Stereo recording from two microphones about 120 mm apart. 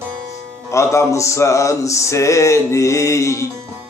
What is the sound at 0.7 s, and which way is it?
Music, 25° left (ahead or behind).